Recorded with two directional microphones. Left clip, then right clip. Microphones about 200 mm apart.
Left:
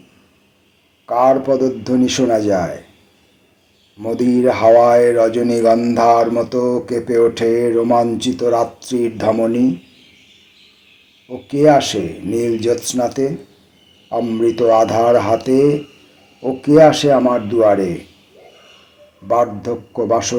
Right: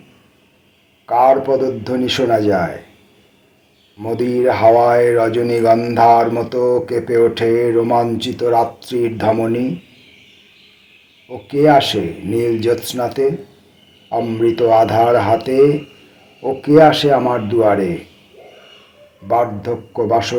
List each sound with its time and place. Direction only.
1.0 s speech: 45° left (ahead or behind)
4.0 s speech: 50° left (ahead or behind)
11.3 s speech: 45° left (ahead or behind)
19.3 s speech: 50° left (ahead or behind)